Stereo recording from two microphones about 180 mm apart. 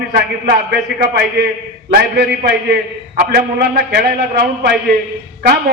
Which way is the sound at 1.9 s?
65° right (ahead or behind).